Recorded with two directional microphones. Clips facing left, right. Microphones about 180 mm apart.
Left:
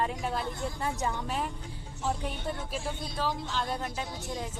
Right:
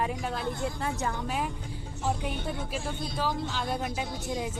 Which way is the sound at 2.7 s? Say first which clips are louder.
Right 2 dB; centre (ahead or behind).